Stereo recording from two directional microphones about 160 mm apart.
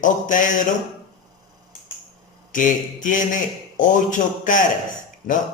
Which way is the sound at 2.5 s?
55° left (ahead or behind).